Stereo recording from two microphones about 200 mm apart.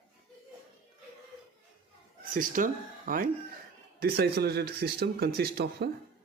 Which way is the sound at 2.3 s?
40° right (ahead or behind).